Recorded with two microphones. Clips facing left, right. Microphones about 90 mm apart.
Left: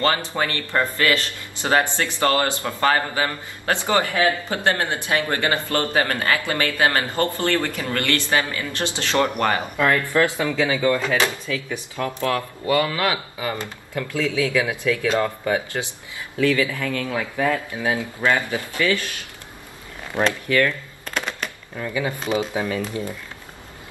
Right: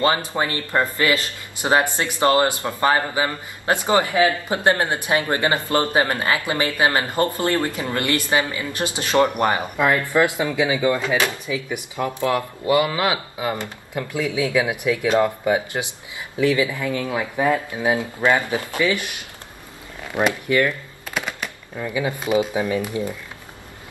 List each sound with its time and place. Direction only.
0.3 s a man's voice: 20° right (ahead or behind)
20.2 s a sound: 15° right (ahead or behind)
21.9 s speech: 15° right (ahead or behind)